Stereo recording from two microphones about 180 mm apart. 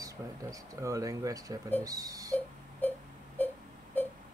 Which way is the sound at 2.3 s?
10° left (ahead or behind).